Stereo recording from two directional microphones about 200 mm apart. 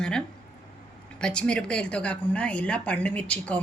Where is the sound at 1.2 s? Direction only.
5° left (ahead or behind).